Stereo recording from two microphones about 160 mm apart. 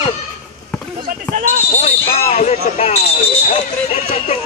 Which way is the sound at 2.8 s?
45° left (ahead or behind).